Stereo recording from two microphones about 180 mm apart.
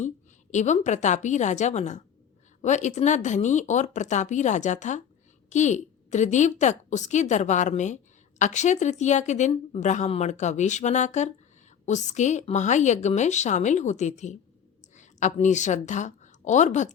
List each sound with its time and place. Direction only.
0.5 s a woman's voice: 40° left (ahead or behind)